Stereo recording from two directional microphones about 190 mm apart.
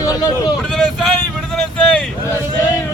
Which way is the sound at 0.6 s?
Centre (ahead or behind).